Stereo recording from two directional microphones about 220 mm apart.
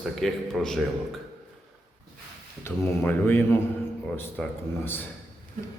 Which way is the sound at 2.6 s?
10° left (ahead or behind).